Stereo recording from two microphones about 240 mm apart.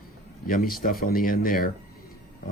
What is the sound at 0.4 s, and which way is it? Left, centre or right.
Speech, left.